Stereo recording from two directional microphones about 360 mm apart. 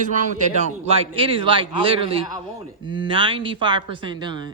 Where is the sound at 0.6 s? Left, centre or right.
Centre.